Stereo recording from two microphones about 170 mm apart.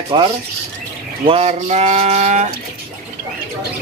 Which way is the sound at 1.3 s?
40° right (ahead or behind).